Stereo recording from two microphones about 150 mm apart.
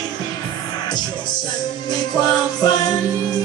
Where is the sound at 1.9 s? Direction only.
25° left (ahead or behind).